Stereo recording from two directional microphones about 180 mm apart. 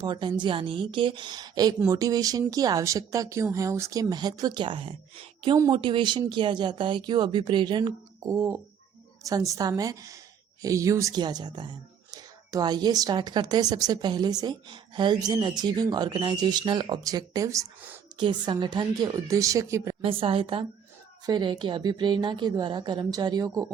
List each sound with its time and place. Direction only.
0.0 s a woman's voice: 25° right (ahead or behind)
20.0 s a woman's voice: 30° right (ahead or behind)